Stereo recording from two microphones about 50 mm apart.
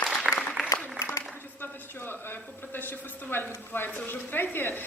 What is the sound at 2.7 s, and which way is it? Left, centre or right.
A woman's voice, left.